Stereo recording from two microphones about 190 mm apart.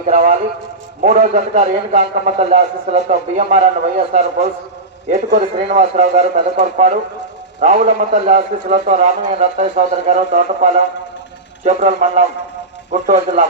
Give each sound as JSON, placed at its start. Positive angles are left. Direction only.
{"t": 0.1, "sound": "a man's voice", "side_deg": -35}